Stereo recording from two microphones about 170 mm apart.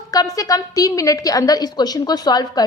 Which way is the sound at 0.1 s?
20° left (ahead or behind).